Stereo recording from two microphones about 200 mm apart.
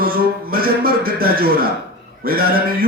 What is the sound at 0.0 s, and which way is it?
Speech, 50° right (ahead or behind).